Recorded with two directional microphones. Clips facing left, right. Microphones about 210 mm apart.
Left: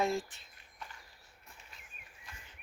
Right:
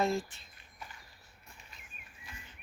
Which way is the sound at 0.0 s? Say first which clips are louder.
Right 1 dB; 15° left (ahead or behind).